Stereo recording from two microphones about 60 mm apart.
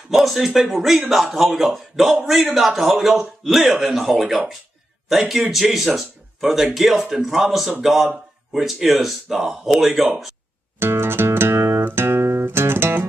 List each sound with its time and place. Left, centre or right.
0.1 s a man's voice: centre
10.8 s guitar: right